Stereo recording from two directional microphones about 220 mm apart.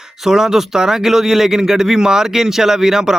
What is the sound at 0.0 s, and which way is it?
A man's voice, centre (ahead or behind).